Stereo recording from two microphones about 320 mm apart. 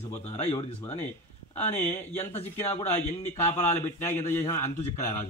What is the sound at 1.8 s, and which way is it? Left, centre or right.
A man's voice, centre.